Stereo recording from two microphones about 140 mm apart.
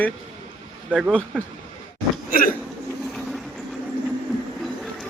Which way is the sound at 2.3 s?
90° left.